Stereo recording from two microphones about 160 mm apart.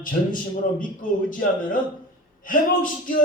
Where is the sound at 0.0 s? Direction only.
60° left (ahead or behind).